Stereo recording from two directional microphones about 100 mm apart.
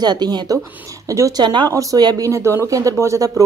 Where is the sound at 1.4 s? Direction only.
50° right (ahead or behind).